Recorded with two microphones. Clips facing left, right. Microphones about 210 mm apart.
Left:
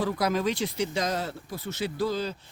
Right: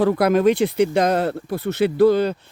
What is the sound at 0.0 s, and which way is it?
Speech, 60° right (ahead or behind).